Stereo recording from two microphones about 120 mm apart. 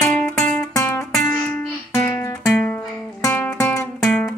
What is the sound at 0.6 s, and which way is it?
Music, 25° left (ahead or behind).